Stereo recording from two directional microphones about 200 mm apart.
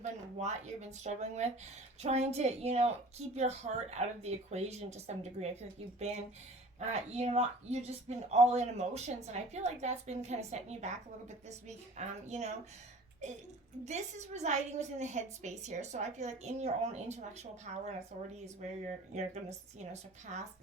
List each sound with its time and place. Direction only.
0.0 s speech: 35° right (ahead or behind)